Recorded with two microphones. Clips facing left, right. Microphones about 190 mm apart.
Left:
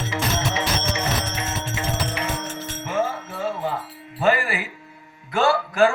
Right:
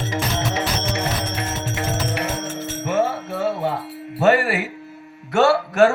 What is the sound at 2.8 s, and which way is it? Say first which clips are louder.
Music: right 4 dB; 70° right (ahead or behind).